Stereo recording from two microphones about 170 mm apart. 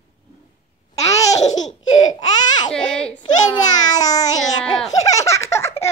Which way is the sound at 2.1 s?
25° left (ahead or behind).